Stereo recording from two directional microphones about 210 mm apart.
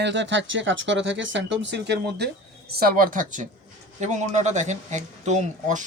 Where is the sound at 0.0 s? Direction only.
60° right (ahead or behind).